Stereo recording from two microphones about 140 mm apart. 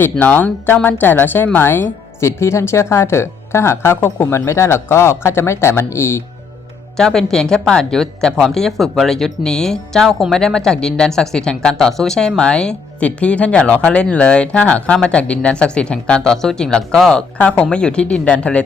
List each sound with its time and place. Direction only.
0.0 s speech: 15° left (ahead or behind)
6.9 s speech: 5° left (ahead or behind)